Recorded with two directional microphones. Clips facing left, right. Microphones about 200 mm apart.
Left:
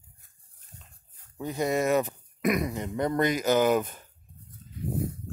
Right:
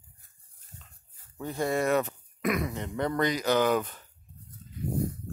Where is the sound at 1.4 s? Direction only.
15° left (ahead or behind).